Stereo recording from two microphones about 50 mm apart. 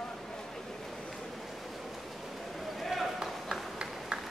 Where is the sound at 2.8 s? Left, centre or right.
Centre.